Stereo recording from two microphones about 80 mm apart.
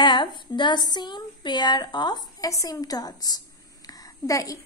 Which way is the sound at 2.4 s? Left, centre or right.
Left.